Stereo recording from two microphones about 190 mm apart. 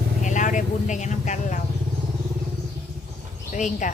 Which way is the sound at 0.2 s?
40° left (ahead or behind).